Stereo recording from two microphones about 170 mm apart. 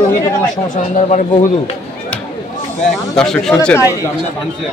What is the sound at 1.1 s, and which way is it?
Speech, 40° left (ahead or behind).